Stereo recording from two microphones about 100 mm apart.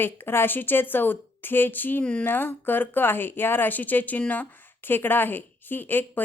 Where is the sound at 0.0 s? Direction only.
20° left (ahead or behind).